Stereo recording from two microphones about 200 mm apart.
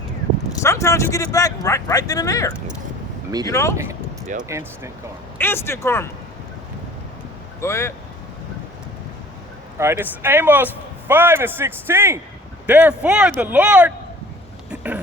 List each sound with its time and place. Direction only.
0.6 s speech: 15° left (ahead or behind)
4.4 s speech: 15° right (ahead or behind)
5.4 s speech: 10° left (ahead or behind)
7.6 s speech: 15° left (ahead or behind)
9.7 s speech: 15° right (ahead or behind)
14.7 s vehicle: 10° right (ahead or behind)